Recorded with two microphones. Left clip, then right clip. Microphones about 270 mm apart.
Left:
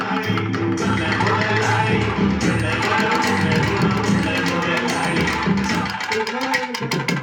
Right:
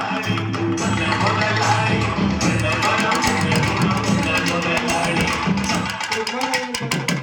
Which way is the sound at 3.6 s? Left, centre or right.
Centre.